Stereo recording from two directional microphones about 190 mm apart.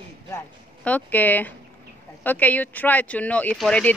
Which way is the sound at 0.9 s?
10° left (ahead or behind).